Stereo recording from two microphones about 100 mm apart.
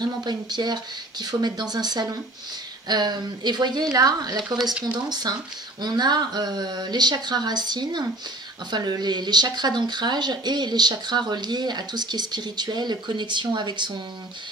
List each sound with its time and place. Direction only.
0.0 s speech: 45° right (ahead or behind)